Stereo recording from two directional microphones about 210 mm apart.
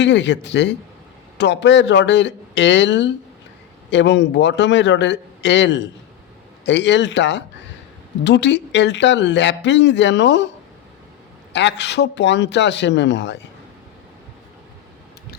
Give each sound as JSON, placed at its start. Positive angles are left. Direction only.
{"t": 0.0, "sound": "speech", "side_deg": 60}
{"t": 11.5, "sound": "speech", "side_deg": 55}